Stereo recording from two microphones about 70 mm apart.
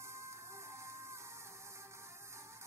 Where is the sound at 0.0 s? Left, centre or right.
Right.